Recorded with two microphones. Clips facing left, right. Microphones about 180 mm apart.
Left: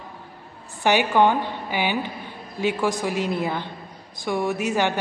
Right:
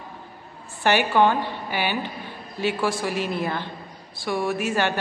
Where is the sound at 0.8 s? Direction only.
15° left (ahead or behind).